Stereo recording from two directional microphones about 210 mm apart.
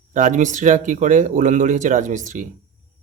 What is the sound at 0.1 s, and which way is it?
Speech, 35° right (ahead or behind).